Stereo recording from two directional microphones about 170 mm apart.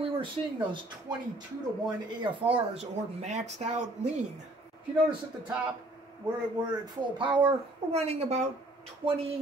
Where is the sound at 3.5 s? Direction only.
45° right (ahead or behind).